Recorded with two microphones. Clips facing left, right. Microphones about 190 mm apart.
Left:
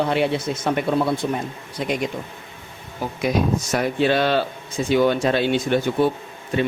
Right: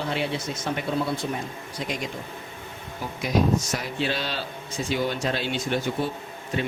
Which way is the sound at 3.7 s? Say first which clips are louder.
Left 9 dB; 60° left (ahead or behind).